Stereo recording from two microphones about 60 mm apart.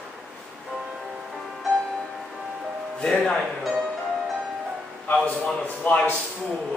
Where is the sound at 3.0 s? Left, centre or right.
Centre.